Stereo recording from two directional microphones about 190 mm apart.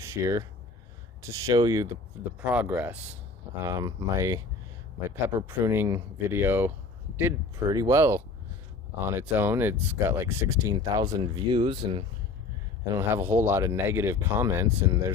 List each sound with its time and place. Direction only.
0.0 s speech: 15° right (ahead or behind)
12.9 s speech: 15° right (ahead or behind)